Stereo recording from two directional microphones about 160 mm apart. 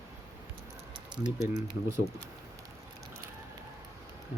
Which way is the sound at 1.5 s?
25° right (ahead or behind).